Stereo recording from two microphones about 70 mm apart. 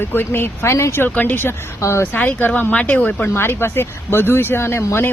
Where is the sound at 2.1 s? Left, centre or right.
Left.